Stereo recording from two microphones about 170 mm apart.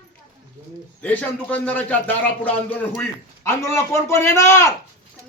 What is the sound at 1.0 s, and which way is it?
A man's voice, 10° left (ahead or behind).